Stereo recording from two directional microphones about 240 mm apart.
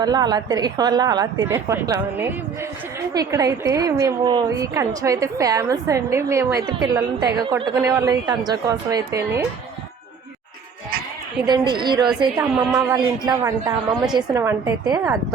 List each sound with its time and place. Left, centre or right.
0.0 s a woman's voice: centre
11.4 s a woman's voice: centre